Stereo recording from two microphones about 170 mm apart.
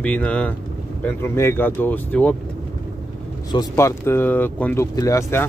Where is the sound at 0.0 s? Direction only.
10° left (ahead or behind).